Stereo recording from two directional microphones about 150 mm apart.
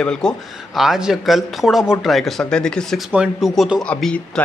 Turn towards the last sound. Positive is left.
turn(degrees=5)  # may be behind; listen again after turning